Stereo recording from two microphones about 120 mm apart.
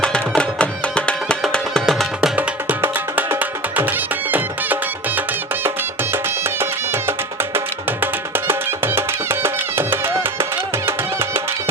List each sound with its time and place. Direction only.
0.0 s music: 5° left (ahead or behind)
2.6 s music: 15° right (ahead or behind)
8.0 s music: 20° right (ahead or behind)